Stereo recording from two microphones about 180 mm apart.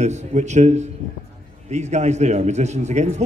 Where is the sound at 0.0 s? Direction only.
40° right (ahead or behind).